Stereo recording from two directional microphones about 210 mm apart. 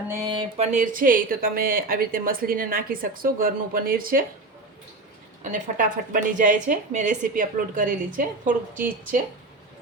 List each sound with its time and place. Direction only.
0.1 s speech: 20° right (ahead or behind)
0.7 s a woman's voice: 40° right (ahead or behind)
5.4 s a woman's voice: 35° right (ahead or behind)